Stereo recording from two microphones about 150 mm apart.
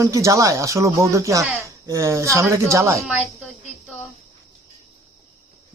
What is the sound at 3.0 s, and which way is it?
Speech, 10° right (ahead or behind).